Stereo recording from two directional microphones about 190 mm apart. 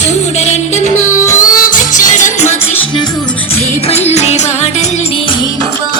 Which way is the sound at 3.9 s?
35° left (ahead or behind).